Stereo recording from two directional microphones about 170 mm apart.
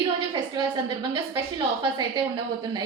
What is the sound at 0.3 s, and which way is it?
A woman's voice, 25° right (ahead or behind).